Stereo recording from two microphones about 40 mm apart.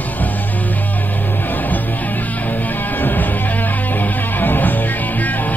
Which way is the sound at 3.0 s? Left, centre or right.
Left.